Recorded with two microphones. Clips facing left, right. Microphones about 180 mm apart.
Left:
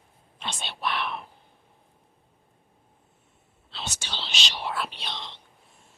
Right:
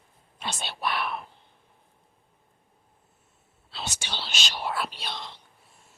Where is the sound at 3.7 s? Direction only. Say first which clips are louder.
Right 1 dB; 10° right (ahead or behind).